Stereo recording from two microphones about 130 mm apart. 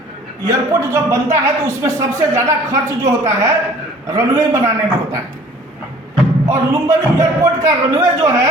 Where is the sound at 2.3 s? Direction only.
25° right (ahead or behind).